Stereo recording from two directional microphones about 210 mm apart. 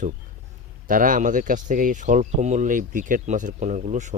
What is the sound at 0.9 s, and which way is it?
Speech, 40° right (ahead or behind).